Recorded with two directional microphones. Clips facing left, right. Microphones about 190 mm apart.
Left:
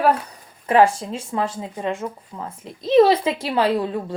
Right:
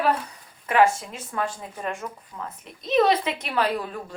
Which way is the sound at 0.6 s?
30° left (ahead or behind).